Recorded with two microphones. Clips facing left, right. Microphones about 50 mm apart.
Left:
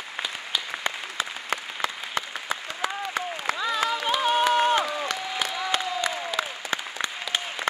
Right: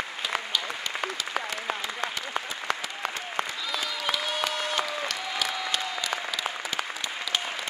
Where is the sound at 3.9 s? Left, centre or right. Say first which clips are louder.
Left 6 dB; left.